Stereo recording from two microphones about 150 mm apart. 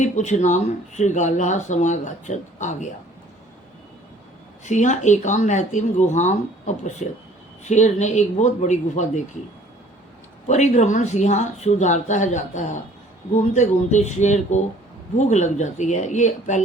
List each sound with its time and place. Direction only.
0.0 s speech: 50° left (ahead or behind)
4.6 s speech: 55° left (ahead or behind)
10.4 s speech: 50° left (ahead or behind)